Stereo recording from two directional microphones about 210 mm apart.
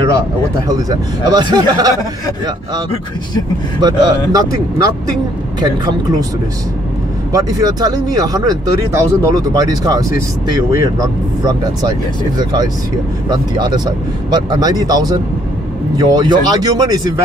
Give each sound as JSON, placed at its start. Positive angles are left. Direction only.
{"t": 0.7, "sound": "speech", "side_deg": -15}
{"t": 3.8, "sound": "speech", "side_deg": -15}
{"t": 7.3, "sound": "speech", "side_deg": -15}
{"t": 13.3, "sound": "speech", "side_deg": -20}